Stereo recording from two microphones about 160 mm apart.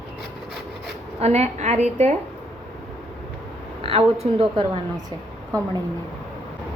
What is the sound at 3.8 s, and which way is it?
Speech, 40° right (ahead or behind).